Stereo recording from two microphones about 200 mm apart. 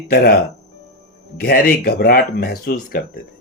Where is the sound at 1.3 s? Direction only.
50° left (ahead or behind).